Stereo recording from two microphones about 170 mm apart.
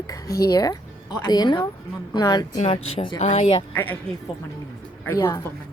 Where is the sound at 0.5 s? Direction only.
20° left (ahead or behind).